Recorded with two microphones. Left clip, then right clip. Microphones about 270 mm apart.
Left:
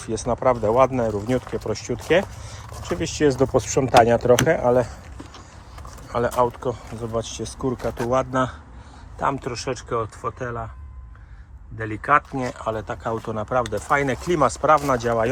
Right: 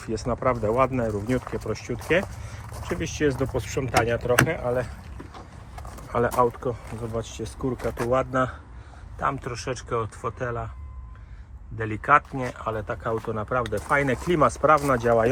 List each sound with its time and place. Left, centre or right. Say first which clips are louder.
0.0 s speech: left 4 dB; centre; by 4.9 s left
6.1 s speech: left 1 dB; centre
7.8 s speech: left 2 dB; centre
8.1 s speech: left 2 dB; centre
11.8 s speech: left 1 dB; centre